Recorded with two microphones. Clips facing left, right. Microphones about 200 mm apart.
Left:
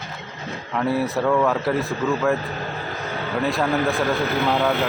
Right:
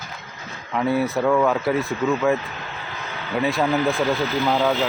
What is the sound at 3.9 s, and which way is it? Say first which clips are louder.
Speech: even; 60° left (ahead or behind).